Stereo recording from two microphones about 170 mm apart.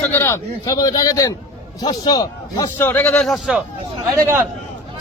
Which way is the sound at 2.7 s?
10° left (ahead or behind).